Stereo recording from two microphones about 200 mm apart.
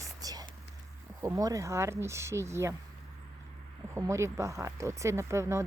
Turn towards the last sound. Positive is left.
turn(degrees=-15)  # may be behind; listen again after turning